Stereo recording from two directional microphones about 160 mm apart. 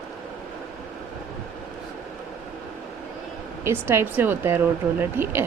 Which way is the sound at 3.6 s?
15° right (ahead or behind).